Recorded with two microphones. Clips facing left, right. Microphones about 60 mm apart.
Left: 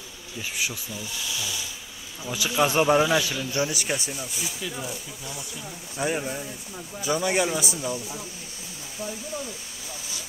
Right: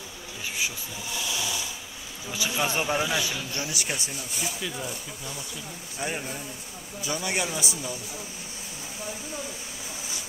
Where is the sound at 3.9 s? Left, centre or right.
Centre; by 8.0 s left.